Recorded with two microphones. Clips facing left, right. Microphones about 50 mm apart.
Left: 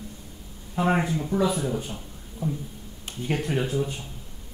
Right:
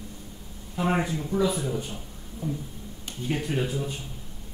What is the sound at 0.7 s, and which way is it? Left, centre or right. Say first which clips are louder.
Speech: left 2 dB; centre.